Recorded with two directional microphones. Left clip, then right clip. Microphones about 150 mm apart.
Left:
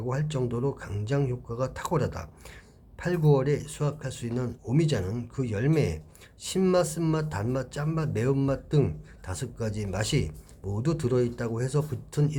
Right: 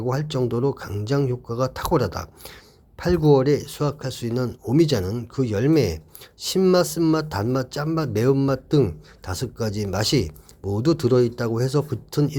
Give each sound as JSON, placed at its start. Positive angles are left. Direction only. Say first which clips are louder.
{"t": 0.0, "sound": "speech", "louder": "right 7 dB", "side_deg": -35}